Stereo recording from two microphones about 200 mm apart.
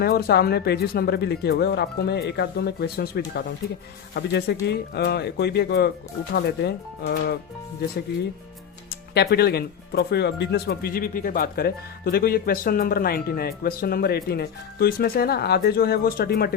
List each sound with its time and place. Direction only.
0.0 s speech: 50° left (ahead or behind)
8.9 s speech: 55° left (ahead or behind)